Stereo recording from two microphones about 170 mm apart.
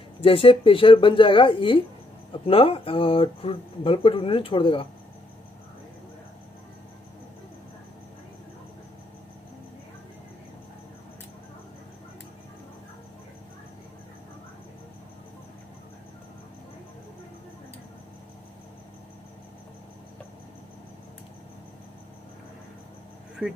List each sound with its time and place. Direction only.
0.2 s speech: 35° left (ahead or behind)